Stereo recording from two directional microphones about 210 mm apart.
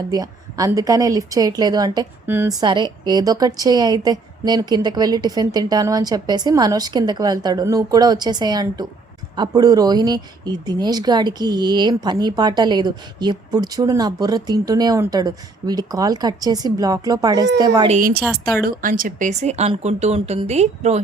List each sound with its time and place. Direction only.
0.1 s speech: 15° right (ahead or behind)
17.8 s speech: 40° right (ahead or behind)